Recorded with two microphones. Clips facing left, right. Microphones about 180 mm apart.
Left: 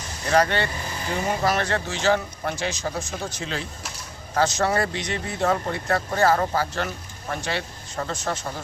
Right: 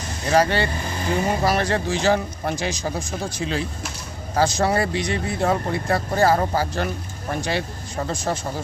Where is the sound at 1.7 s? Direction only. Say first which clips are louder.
Right 2 dB; 15° right (ahead or behind).